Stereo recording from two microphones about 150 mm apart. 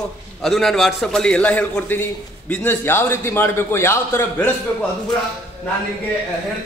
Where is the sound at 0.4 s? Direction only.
Centre (ahead or behind).